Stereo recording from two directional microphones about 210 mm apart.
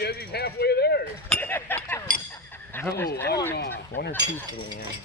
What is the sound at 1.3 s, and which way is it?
Speech, 10° left (ahead or behind).